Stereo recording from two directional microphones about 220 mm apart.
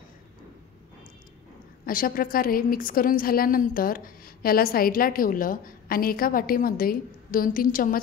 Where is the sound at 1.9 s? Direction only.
40° left (ahead or behind).